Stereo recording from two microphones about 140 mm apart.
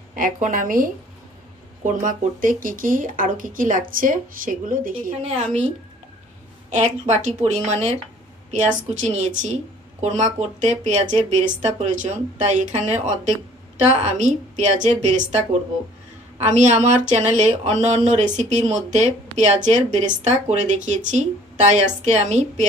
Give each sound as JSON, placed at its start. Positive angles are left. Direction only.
{"t": 0.1, "sound": "speech", "side_deg": -75}
{"t": 1.8, "sound": "speech", "side_deg": -65}
{"t": 5.2, "sound": "a woman's voice", "side_deg": -50}
{"t": 6.7, "sound": "speech", "side_deg": -55}
{"t": 14.0, "sound": "speech", "side_deg": -55}
{"t": 16.3, "sound": "a woman's voice", "side_deg": -55}